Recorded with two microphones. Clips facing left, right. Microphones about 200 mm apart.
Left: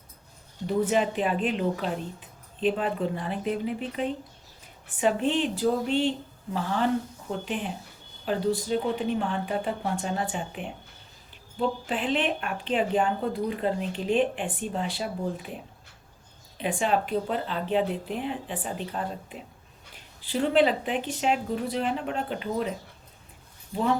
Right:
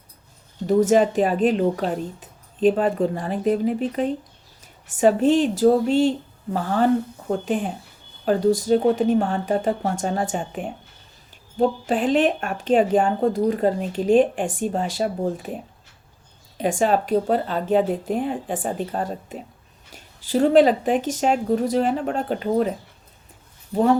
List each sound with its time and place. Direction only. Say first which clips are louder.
0.7 s speech: right 8 dB; 45° right (ahead or behind)
16.6 s speech: right 6 dB; 45° right (ahead or behind)